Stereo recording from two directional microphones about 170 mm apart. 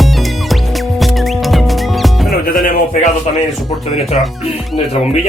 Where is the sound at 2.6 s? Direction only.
45° left (ahead or behind).